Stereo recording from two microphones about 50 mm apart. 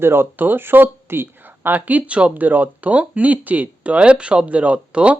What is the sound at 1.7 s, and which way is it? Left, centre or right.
Speech, right.